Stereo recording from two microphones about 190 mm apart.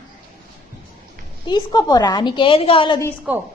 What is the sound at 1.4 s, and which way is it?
A woman's voice, 20° left (ahead or behind).